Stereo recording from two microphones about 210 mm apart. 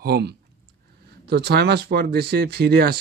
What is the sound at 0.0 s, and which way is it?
Speech, 50° right (ahead or behind).